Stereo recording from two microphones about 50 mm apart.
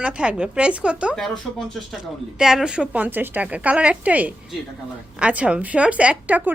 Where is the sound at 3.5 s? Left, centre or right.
Right.